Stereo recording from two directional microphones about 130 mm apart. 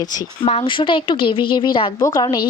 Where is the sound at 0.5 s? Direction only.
45° left (ahead or behind).